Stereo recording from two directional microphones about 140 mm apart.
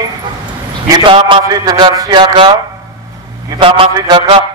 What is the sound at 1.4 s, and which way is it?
A man's voice, 25° right (ahead or behind).